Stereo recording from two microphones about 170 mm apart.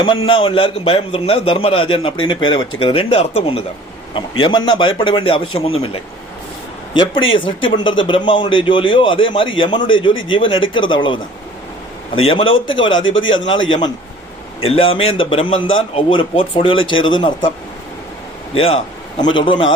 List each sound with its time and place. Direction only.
0.0 s a man's voice: 30° left (ahead or behind)
12.2 s a man's voice: 30° left (ahead or behind)
18.5 s a man's voice: 35° left (ahead or behind)